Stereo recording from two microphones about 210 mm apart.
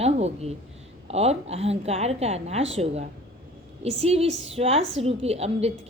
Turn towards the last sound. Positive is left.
turn(degrees=-30)  # may be behind; listen again after turning